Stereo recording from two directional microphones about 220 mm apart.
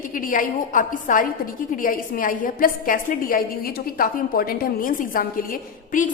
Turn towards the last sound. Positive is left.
turn(degrees=40)  # may be behind; listen again after turning